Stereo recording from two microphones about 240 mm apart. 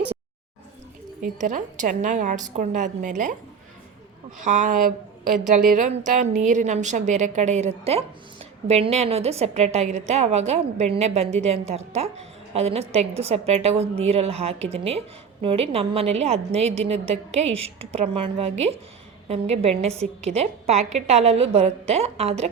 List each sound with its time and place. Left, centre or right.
1.2 s a woman's voice: right
4.4 s a woman's voice: right